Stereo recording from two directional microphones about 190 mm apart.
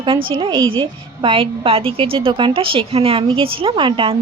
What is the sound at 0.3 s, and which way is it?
A woman's voice, 25° right (ahead or behind).